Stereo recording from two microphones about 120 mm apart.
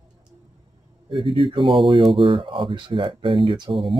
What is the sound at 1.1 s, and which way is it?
Speech, 45° right (ahead or behind).